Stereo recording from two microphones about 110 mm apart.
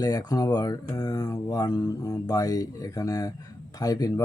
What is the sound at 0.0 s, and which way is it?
Speech, 35° left (ahead or behind).